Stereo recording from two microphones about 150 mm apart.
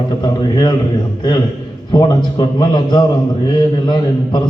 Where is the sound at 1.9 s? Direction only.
30° left (ahead or behind).